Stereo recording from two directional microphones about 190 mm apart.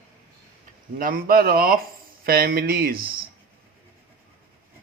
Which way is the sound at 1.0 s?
50° right (ahead or behind).